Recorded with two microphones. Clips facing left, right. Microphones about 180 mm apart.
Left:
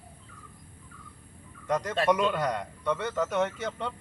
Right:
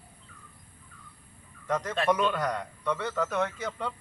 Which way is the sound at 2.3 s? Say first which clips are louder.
Left 1 dB; 20° left (ahead or behind).